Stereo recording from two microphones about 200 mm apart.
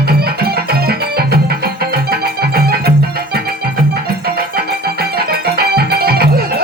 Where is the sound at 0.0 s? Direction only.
50° right (ahead or behind).